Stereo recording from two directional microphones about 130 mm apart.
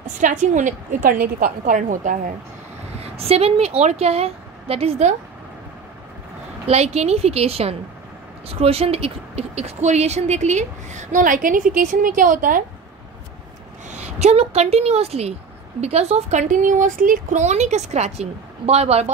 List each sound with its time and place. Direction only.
0.0 s a woman's voice: 80° right
3.0 s a woman's voice: 50° right (ahead or behind)
6.7 s a woman's voice: 55° right (ahead or behind); by 12.6 s 90° right
13.8 s a woman's voice: 65° right (ahead or behind)